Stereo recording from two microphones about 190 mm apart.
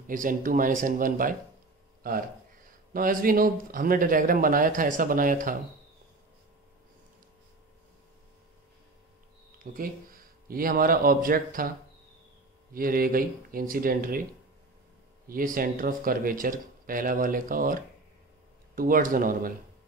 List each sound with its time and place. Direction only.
0.0 s speech: 45° right (ahead or behind)
2.9 s speech: 45° right (ahead or behind)
9.6 s speech: 50° right (ahead or behind)
12.7 s speech: 50° right (ahead or behind)
15.2 s speech: 50° right (ahead or behind)
18.8 s speech: 50° right (ahead or behind)